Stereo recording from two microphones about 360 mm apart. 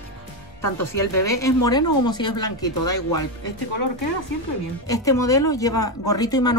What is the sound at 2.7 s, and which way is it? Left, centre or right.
Speech, left.